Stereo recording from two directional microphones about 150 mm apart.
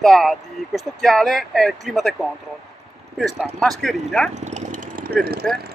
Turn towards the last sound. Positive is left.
turn(degrees=0)  # may be behind; listen again after turning